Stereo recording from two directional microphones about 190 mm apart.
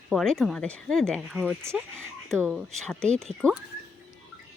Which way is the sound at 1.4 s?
10° right (ahead or behind).